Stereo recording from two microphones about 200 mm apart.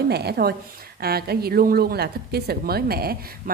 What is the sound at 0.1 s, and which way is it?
Speech, 55° right (ahead or behind).